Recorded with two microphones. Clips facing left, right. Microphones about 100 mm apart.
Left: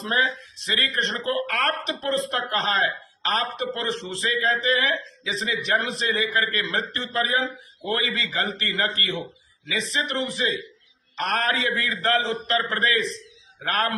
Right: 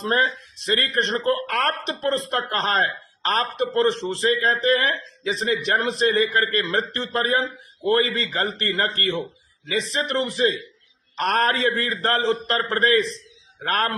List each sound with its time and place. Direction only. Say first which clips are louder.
0.0 s a man's voice: right 3 dB; 45° right (ahead or behind)